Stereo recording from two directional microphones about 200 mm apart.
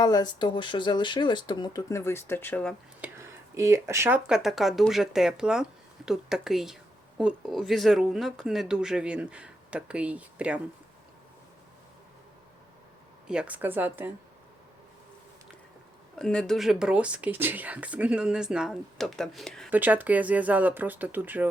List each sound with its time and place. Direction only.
0.0 s speech: 20° left (ahead or behind)
3.0 s a sound: 15° right (ahead or behind)
4.3 s speech: centre (ahead or behind)
13.2 s speech: 5° right (ahead or behind)
16.1 s speech: 5° left (ahead or behind)
19.7 s speech: 10° right (ahead or behind)